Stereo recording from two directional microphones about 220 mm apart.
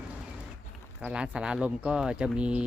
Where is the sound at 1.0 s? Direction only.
5° right (ahead or behind).